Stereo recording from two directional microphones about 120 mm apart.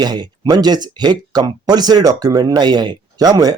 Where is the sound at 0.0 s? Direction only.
35° right (ahead or behind).